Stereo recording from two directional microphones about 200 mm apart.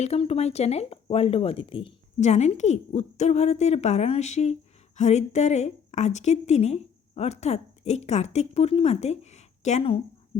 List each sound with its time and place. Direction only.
0.0 s a woman's voice: 30° left (ahead or behind)